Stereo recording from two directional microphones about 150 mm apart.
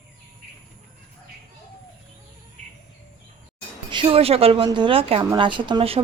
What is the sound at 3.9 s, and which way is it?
A woman's voice, 35° right (ahead or behind).